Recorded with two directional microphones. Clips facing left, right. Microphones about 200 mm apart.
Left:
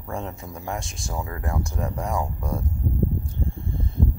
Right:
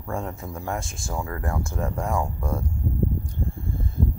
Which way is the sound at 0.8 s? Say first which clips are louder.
Right 1 dB; centre (ahead or behind).